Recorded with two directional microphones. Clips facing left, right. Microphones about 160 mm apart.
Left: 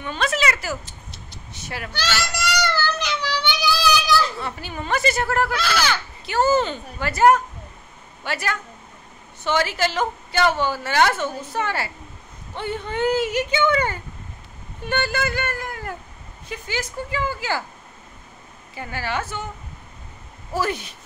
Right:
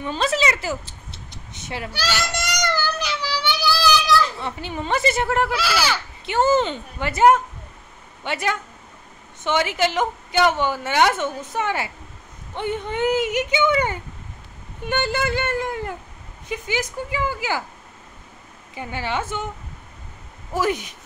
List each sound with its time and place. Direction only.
0.0 s speech: 30° right (ahead or behind)
1.9 s speech: 10° right (ahead or behind)
2.3 s child singing: 15° right (ahead or behind)
4.4 s a woman's voice: 25° right (ahead or behind)
5.5 s speech: 5° right (ahead or behind)
6.2 s a woman's voice: 20° right (ahead or behind)
18.8 s a woman's voice: 20° right (ahead or behind)
20.5 s speech: 15° right (ahead or behind)